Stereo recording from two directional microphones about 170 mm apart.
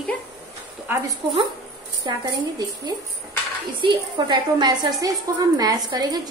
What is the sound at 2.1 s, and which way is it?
A woman's voice, 25° right (ahead or behind).